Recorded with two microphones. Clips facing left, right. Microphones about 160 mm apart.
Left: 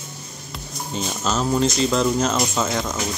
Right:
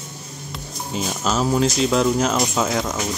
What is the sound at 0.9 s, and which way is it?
Speech, 5° right (ahead or behind).